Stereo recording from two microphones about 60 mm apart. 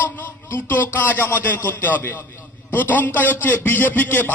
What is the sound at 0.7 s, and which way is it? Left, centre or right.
A man's voice, left.